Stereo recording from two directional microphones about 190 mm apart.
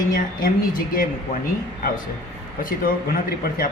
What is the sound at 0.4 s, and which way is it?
Speech, 45° left (ahead or behind).